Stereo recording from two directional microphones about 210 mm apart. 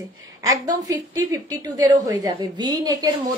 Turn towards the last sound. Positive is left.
turn(degrees=-20)  # may be behind; listen again after turning